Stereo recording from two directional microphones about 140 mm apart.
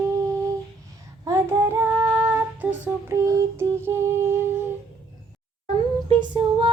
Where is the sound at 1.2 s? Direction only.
20° right (ahead or behind).